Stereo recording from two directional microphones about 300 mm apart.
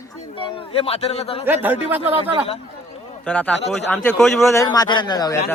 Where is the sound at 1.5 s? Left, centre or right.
Centre.